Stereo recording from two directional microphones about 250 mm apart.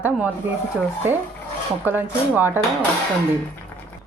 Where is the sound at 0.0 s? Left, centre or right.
Centre.